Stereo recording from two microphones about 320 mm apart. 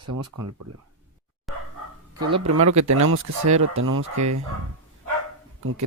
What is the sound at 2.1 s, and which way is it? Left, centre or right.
Speech, right.